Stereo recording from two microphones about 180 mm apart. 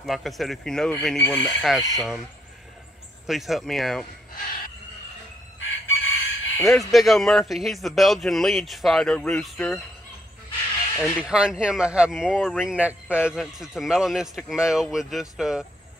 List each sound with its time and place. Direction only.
0.0 s speech: centre (ahead or behind)
3.3 s speech: centre (ahead or behind)
5.6 s chicken: 90° left
6.6 s speech: centre (ahead or behind)
11.1 s speech: 5° right (ahead or behind)